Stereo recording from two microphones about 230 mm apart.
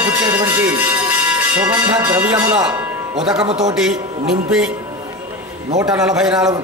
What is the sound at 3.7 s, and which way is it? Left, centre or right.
Speech, centre.